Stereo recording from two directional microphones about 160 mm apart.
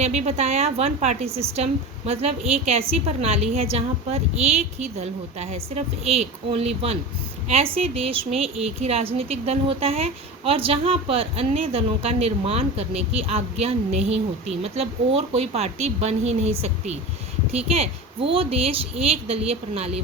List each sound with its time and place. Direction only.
0.0 s a woman's voice: 45° right (ahead or behind)